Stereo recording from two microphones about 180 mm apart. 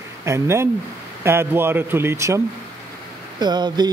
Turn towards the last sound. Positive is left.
turn(degrees=-25)  # may be behind; listen again after turning